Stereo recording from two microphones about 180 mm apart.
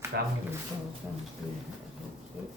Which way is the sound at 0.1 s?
60° right (ahead or behind).